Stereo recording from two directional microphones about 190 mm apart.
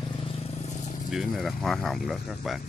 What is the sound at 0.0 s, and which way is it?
Vehicle, 25° left (ahead or behind).